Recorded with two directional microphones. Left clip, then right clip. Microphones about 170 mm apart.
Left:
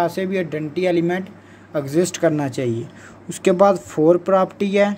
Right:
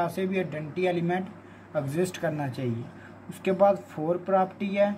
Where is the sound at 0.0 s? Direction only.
45° left (ahead or behind).